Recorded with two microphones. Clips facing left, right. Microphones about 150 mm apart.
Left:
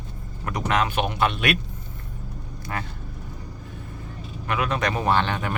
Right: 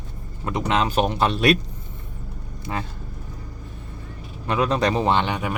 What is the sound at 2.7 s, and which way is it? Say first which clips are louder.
Speech: right 3 dB; 20° right (ahead or behind).